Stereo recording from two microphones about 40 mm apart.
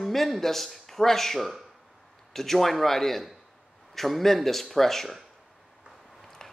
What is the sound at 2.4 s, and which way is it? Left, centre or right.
A man's voice, centre.